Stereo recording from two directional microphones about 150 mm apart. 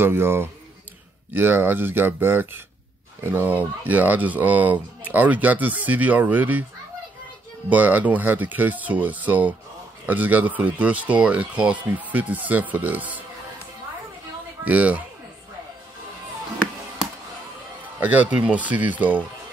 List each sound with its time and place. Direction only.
0.0 s speech: 15° right (ahead or behind)
7.7 s speech: 10° right (ahead or behind)
14.6 s speech: 10° right (ahead or behind)
18.0 s speech: 10° right (ahead or behind)